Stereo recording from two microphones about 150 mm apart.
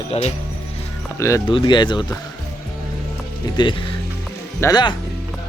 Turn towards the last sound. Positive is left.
turn(degrees=25)  # may be behind; listen again after turning